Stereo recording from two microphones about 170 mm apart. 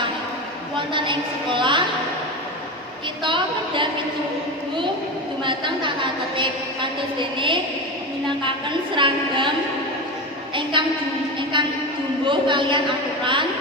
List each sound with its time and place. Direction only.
0.9 s a woman's voice: 30° right (ahead or behind)
3.2 s a woman's voice: 30° right (ahead or behind)
5.4 s a woman's voice: 30° right (ahead or behind)
7.2 s a woman's voice: 30° right (ahead or behind)
9.0 s a woman's voice: 30° right (ahead or behind)
10.5 s a woman's voice: 30° right (ahead or behind)